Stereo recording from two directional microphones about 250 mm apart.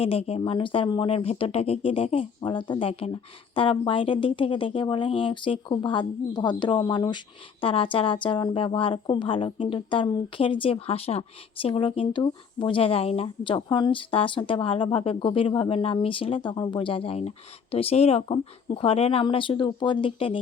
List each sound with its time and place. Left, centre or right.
0.0 s a woman's voice: left